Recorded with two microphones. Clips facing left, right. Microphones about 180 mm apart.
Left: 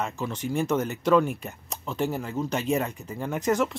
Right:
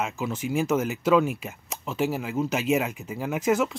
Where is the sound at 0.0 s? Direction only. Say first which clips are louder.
Right 1 dB; 5° right (ahead or behind).